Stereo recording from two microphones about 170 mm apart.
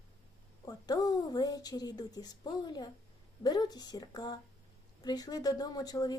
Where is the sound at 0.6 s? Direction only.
25° left (ahead or behind).